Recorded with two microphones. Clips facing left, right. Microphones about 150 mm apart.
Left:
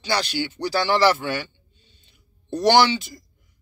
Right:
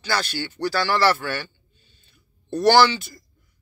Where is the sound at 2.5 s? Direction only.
20° left (ahead or behind).